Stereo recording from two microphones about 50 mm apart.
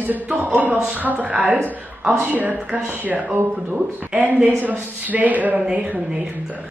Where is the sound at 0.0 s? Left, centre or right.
Right.